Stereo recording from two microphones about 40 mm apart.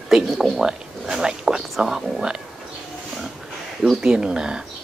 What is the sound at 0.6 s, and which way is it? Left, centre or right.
Speech, centre.